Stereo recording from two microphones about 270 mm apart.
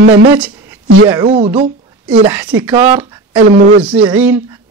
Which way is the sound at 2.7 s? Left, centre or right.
Centre.